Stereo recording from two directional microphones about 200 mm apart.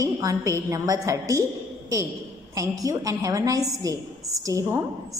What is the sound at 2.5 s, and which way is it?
A woman's voice, 15° right (ahead or behind).